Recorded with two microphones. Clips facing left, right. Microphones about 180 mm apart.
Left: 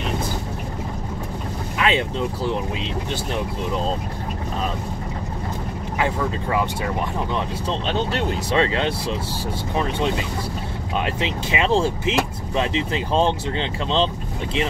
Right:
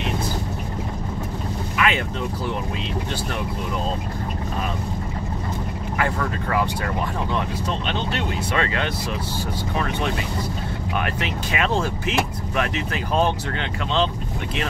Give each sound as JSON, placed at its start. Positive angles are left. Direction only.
{"t": 1.8, "sound": "speech", "side_deg": 30}
{"t": 5.9, "sound": "speech", "side_deg": 20}
{"t": 7.3, "sound": "speech", "side_deg": 35}
{"t": 11.1, "sound": "speech", "side_deg": 20}